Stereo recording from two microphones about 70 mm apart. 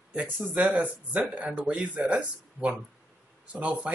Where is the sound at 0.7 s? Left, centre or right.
Centre.